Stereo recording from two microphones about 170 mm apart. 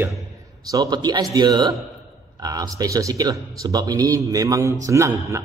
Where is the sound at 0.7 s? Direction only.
20° right (ahead or behind).